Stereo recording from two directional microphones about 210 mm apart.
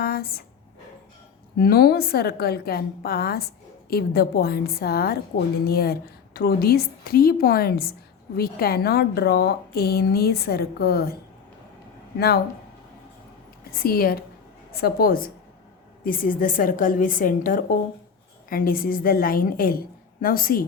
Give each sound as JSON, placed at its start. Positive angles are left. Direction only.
{"t": 0.0, "sound": "speech", "side_deg": 45}
{"t": 1.5, "sound": "a woman's voice", "side_deg": 45}
{"t": 12.1, "sound": "speech", "side_deg": 50}
{"t": 13.7, "sound": "a woman's voice", "side_deg": 45}